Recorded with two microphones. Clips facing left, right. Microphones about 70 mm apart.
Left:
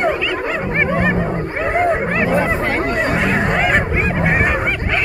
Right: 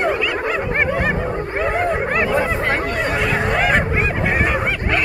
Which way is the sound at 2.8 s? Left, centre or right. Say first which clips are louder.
Left 3 dB; left.